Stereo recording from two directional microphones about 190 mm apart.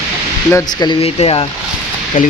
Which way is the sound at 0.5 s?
20° left (ahead or behind).